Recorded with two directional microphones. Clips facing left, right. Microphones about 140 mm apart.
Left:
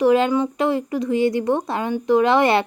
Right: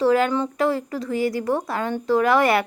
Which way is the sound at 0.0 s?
20° left (ahead or behind).